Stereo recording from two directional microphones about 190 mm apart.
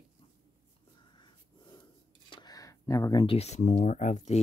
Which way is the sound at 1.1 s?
25° left (ahead or behind).